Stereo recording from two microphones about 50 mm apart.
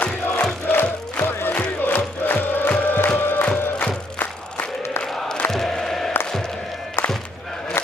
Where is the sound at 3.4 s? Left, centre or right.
Left.